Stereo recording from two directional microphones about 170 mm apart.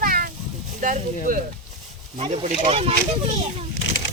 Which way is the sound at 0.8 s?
50° right (ahead or behind).